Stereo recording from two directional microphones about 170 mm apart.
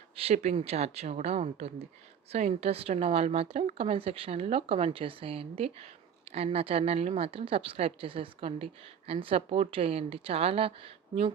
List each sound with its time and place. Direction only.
0.2 s a woman's voice: 35° right (ahead or behind)